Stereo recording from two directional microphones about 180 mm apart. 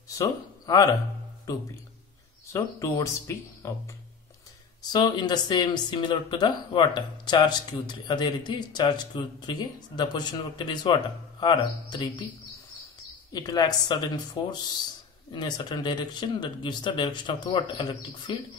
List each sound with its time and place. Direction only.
0.2 s speech: 20° left (ahead or behind)
2.5 s speech: 15° left (ahead or behind)
4.8 s speech: 25° left (ahead or behind)
13.3 s speech: 20° left (ahead or behind)